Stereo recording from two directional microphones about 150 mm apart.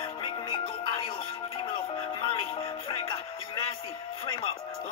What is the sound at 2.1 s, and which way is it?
Music, 35° left (ahead or behind).